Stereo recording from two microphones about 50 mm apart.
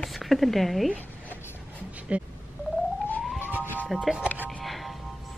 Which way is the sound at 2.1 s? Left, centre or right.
Right.